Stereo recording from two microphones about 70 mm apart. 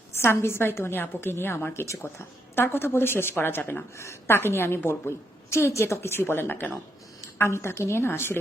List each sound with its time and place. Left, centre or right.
0.2 s a woman's voice: left
2.6 s a woman's voice: left
3.9 s a woman's voice: left